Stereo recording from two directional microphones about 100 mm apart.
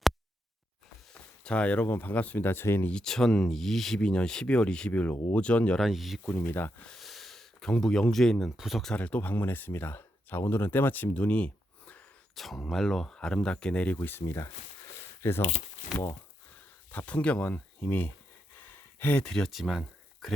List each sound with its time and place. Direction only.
1.1 s speech: 10° left (ahead or behind)
2.9 s speech: 5° left (ahead or behind)
5.8 s speech: centre (ahead or behind)
6.3 s speech: 20° left (ahead or behind)
6.9 s speech: centre (ahead or behind)
9.0 s speech: 15° left (ahead or behind)
12.3 s speech: centre (ahead or behind); by 14.5 s 25° left (ahead or behind)
15.4 s speech: 90° left
16.9 s speech: 15° left (ahead or behind)
18.5 s a sound: 20° left (ahead or behind); by 20.3 s centre (ahead or behind)